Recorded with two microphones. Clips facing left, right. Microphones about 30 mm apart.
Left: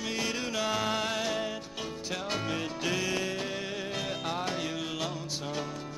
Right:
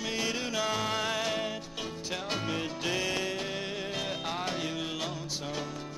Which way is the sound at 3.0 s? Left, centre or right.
Centre.